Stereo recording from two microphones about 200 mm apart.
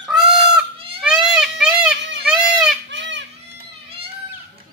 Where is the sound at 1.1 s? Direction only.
Centre (ahead or behind).